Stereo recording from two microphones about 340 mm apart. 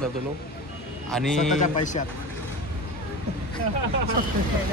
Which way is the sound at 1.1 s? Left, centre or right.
Centre.